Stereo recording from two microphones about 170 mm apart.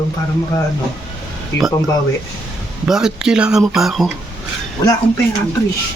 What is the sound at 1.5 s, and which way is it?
Speech, 90° left.